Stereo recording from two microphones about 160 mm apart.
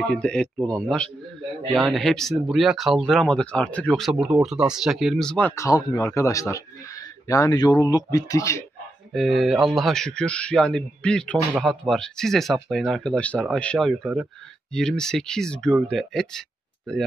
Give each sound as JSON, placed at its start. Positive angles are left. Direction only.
{"t": 0.0, "sound": "speech", "side_deg": 5}
{"t": 5.6, "sound": "speech", "side_deg": 20}
{"t": 9.1, "sound": "speech", "side_deg": 0}